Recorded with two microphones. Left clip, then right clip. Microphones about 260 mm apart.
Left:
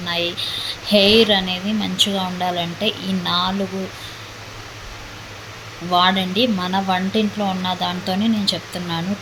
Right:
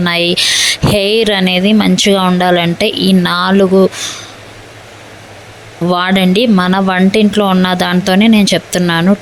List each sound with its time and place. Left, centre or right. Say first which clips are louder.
0.0 s speech: right 11 dB; right
5.9 s speech: right 4 dB; right